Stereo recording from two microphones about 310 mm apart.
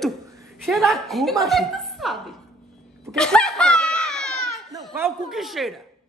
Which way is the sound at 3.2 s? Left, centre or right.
Centre.